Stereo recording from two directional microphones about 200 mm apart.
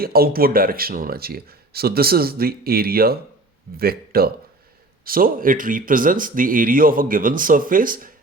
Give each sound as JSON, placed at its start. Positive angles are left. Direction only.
{"t": 0.0, "sound": "speech", "side_deg": -50}